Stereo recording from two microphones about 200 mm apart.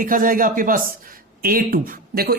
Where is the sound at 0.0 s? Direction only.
45° right (ahead or behind).